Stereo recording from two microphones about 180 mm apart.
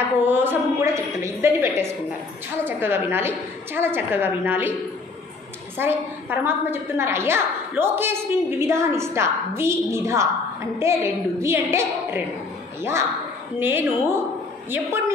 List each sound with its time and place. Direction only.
0.2 s a woman's voice: 10° right (ahead or behind)
5.8 s a woman's voice: 10° right (ahead or behind)
13.6 s a woman's voice: 10° right (ahead or behind)